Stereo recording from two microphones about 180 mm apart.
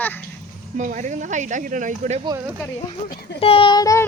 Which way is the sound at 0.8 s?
45° right (ahead or behind).